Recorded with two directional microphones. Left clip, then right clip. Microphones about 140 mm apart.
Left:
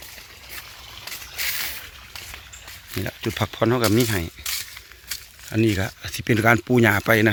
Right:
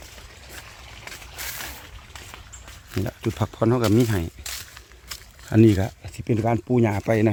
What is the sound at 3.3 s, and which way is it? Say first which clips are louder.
Speech: left 3 dB; 10° right (ahead or behind).